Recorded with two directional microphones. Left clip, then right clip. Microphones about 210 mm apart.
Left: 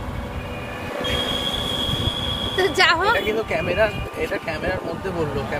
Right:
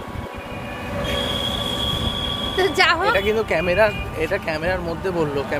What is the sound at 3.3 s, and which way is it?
Speech, 50° right (ahead or behind).